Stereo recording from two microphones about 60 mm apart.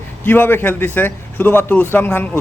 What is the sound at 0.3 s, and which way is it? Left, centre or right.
A man's voice, left.